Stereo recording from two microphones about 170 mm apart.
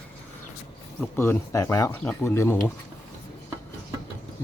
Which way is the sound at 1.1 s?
15° left (ahead or behind).